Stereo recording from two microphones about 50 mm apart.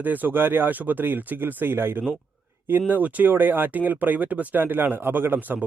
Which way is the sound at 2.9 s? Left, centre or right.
Right.